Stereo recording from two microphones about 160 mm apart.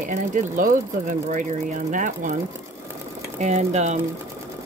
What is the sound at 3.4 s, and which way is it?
Speech, 45° right (ahead or behind).